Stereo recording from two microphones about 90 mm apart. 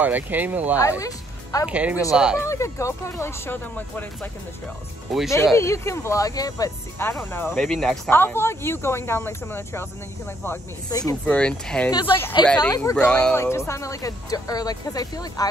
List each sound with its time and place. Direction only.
0.0 s speech: 20° right (ahead or behind)
0.7 s speech: 35° left (ahead or behind)
1.7 s speech: 15° right (ahead or behind)
2.4 s speech: 35° left (ahead or behind)
5.3 s speech: 30° left (ahead or behind)
7.0 s speech: 25° left (ahead or behind)
7.5 s speech: 5° left (ahead or behind)
8.1 s speech: 25° left (ahead or behind)
10.9 s speech: 45° left (ahead or behind)
11.2 s speech: 10° left (ahead or behind)
11.9 s speech: 60° left (ahead or behind)
12.9 s speech: 10° left (ahead or behind)
13.4 s speech: 30° left (ahead or behind)